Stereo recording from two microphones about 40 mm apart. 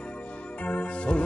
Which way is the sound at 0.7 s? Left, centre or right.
Left.